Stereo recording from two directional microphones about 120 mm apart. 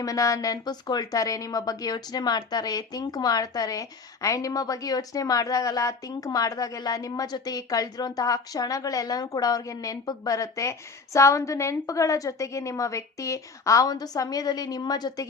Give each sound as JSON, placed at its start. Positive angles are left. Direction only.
{"t": 0.0, "sound": "a woman's voice", "side_deg": 30}